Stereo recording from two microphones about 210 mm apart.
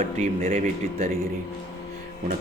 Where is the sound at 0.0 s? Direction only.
40° right (ahead or behind).